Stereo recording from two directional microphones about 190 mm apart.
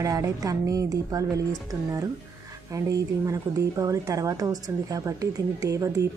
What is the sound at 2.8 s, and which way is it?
Speech, 15° right (ahead or behind).